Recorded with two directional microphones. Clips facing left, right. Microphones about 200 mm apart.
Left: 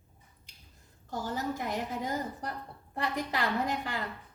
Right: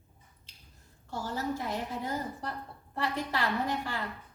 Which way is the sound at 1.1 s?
15° left (ahead or behind).